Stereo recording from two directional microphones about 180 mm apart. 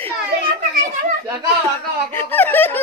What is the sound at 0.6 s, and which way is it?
Children playing, 55° right (ahead or behind).